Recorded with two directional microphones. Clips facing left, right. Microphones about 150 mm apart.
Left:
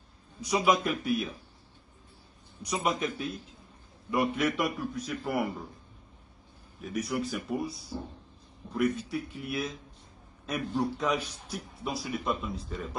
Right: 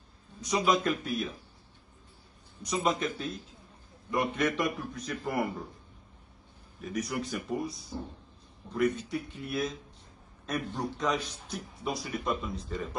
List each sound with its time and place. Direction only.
0.4 s a man's voice: 10° left (ahead or behind)
2.6 s a man's voice: 10° left (ahead or behind)
6.8 s a man's voice: centre (ahead or behind)
8.7 s a man's voice: centre (ahead or behind)